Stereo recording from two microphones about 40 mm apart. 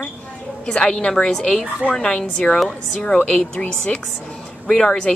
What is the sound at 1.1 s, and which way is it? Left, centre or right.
Speech, centre.